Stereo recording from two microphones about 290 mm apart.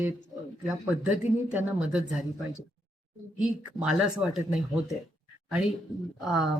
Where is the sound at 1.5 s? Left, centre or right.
Centre.